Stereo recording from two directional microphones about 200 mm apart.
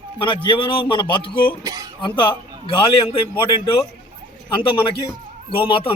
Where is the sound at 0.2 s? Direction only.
25° left (ahead or behind).